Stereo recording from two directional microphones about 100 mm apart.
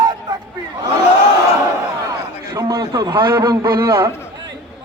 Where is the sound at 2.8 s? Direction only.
50° right (ahead or behind).